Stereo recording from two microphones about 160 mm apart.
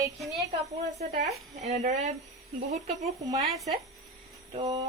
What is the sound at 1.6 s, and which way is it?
Speech, 45° right (ahead or behind).